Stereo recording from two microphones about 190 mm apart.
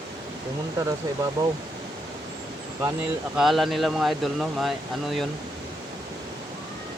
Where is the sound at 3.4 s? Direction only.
Centre (ahead or behind).